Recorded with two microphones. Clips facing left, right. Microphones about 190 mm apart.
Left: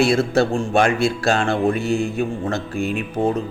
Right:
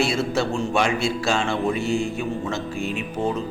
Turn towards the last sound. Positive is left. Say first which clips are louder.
# left 4 dB
turn(degrees=55)  # may be behind; listen again after turning